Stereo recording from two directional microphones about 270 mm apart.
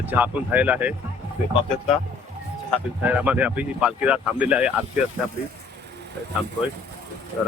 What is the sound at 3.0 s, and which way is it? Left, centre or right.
Speech, centre.